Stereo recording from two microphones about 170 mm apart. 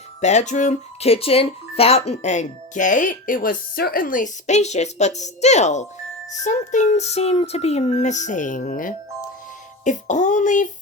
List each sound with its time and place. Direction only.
0.2 s speech: 45° left (ahead or behind)